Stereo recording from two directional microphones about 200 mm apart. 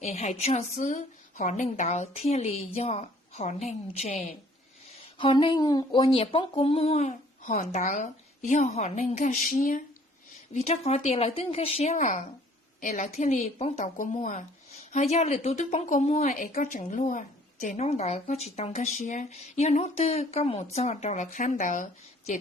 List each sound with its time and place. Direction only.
0.0 s speech: 35° left (ahead or behind)
10.5 s speech: 30° left (ahead or behind)
16.4 s speech: 45° left (ahead or behind)